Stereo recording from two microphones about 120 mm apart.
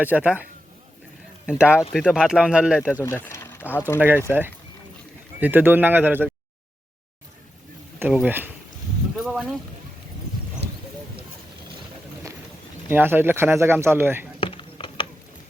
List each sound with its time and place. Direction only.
0.0 s speech: 10° right (ahead or behind)
1.5 s speech: 10° right (ahead or behind)
3.0 s speech: 20° left (ahead or behind)
4.3 s speech: 20° right (ahead or behind)
7.9 s speech: 15° right (ahead or behind)
9.1 s speech: 5° right (ahead or behind)
12.9 s speech: 15° right (ahead or behind)
14.4 s mechanisms: 40° left (ahead or behind)